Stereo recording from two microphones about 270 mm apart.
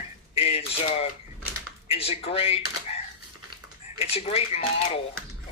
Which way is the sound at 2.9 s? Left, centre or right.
Left.